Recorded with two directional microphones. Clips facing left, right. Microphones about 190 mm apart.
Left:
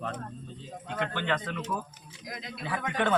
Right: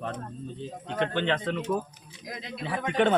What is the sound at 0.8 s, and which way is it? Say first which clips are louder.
Speech: right 5 dB; 25° right (ahead or behind).